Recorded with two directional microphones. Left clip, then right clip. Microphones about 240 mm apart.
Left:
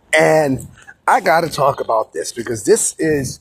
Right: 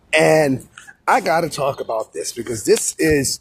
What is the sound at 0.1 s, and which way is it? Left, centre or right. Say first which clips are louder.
Speech: left 1 dB; centre.